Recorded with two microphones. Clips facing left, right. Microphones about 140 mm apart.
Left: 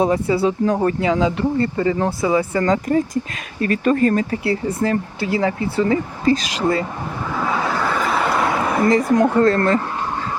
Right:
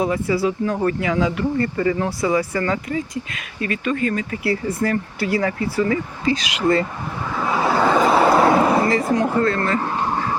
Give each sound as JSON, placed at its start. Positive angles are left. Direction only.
{"t": 0.0, "sound": "speech", "side_deg": 30}
{"t": 3.6, "sound": "speech", "side_deg": 40}
{"t": 4.8, "sound": "speech", "side_deg": 20}
{"t": 6.2, "sound": "speech", "side_deg": 40}
{"t": 7.7, "sound": "a sound", "side_deg": -20}
{"t": 9.4, "sound": "speech", "side_deg": 40}